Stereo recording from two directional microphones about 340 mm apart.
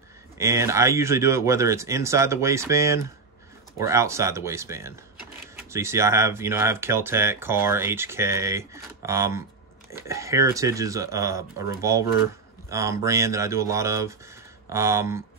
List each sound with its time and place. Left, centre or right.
0.4 s speech: centre